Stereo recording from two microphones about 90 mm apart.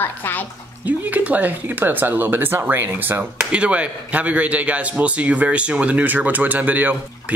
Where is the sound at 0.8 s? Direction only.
20° right (ahead or behind).